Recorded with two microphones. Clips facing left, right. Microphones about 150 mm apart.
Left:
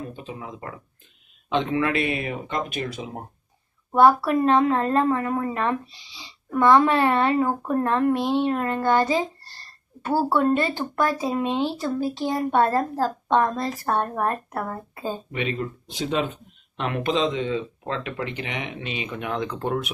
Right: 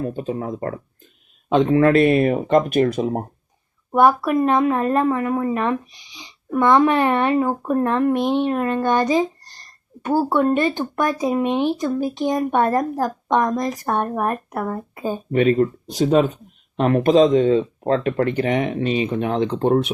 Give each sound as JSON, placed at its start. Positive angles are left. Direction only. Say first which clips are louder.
{"t": 0.0, "sound": "speech", "louder": "right 10 dB", "side_deg": -45}
{"t": 3.9, "sound": "a child's voice", "louder": "right 1 dB", "side_deg": -15}
{"t": 15.3, "sound": "speech", "louder": "right 11 dB", "side_deg": -45}